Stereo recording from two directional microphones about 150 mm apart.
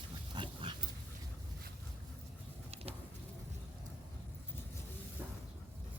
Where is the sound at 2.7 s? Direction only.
45° right (ahead or behind).